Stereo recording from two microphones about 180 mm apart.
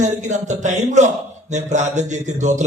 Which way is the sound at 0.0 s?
40° right (ahead or behind).